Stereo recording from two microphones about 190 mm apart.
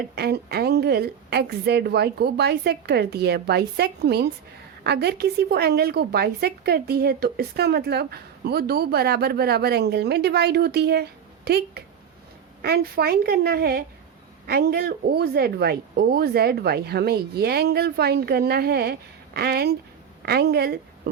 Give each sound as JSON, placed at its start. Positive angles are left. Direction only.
{"t": 0.2, "sound": "a woman's voice", "side_deg": -60}